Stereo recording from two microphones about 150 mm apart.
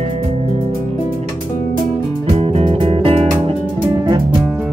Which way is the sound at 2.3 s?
40° right (ahead or behind).